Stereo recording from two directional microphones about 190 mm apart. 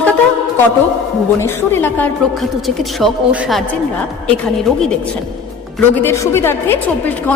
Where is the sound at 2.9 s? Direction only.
5° right (ahead or behind).